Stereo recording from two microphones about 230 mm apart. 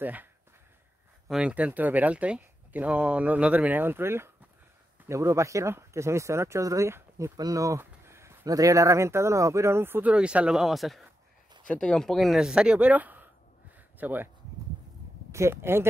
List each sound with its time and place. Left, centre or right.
0.0 s speech: centre
1.3 s speech: centre
15.3 s speech: centre